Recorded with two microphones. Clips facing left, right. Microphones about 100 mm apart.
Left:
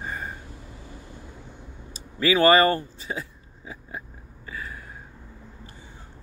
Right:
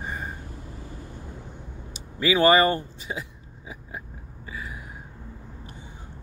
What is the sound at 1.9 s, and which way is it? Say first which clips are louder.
Speech: left 1 dB; 20° right (ahead or behind).